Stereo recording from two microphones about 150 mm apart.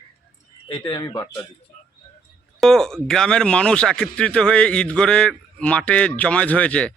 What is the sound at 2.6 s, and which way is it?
Speech, 5° left (ahead or behind).